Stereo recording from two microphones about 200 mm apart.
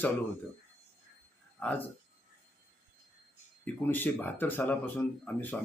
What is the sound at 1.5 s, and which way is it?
Speech, 10° left (ahead or behind).